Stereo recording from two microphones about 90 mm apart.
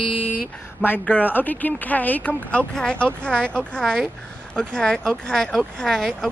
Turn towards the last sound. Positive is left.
turn(degrees=5)  # may be behind; listen again after turning